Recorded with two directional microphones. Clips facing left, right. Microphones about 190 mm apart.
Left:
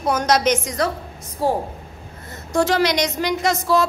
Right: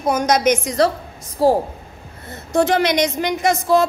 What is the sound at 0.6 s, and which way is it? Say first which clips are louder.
Speech: right 5 dB; 35° right (ahead or behind).